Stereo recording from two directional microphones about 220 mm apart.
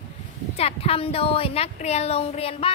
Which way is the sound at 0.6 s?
25° left (ahead or behind).